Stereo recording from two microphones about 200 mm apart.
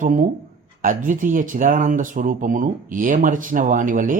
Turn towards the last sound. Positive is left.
turn(degrees=-40)  # may be behind; listen again after turning